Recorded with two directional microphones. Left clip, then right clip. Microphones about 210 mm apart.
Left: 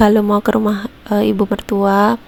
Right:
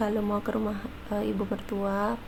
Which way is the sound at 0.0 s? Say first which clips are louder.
Left 16 dB; 40° left (ahead or behind).